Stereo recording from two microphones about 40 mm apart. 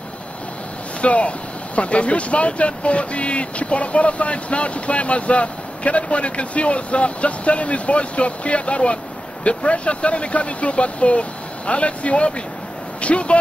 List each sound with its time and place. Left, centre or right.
1.0 s speech: left